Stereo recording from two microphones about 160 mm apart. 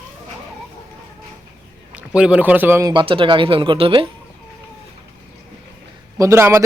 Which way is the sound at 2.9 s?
30° right (ahead or behind).